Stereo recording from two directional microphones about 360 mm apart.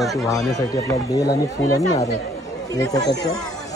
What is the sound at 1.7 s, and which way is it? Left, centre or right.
Speech, centre.